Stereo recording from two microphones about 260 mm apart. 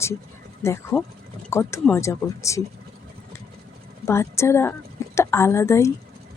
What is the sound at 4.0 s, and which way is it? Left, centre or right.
A woman's voice, centre.